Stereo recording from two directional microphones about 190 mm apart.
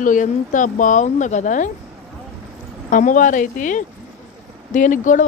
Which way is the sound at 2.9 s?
40° left (ahead or behind).